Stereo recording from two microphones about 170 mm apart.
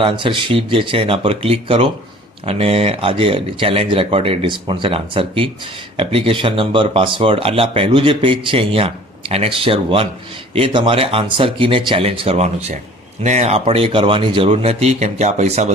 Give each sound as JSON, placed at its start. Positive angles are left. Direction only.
{"t": 0.0, "sound": "speech", "side_deg": -30}